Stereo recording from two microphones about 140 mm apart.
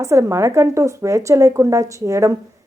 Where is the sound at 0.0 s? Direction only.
20° right (ahead or behind).